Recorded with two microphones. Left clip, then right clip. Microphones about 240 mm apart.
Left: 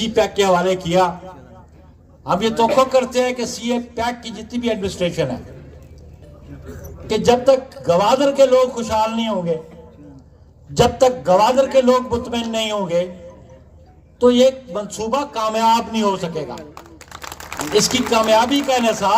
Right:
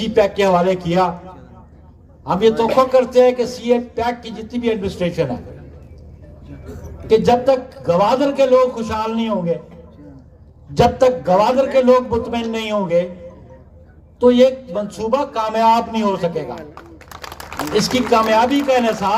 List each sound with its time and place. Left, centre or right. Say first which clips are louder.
0.0 s a man's voice: right 2 dB; left
6.7 s a man's voice: right 8 dB; left
10.8 s a man's voice: right 1 dB; left
14.2 s a man's voice: right 1 dB; left
16.6 s a sound: right 1 dB; centre
17.7 s a man's voice: right 1 dB; left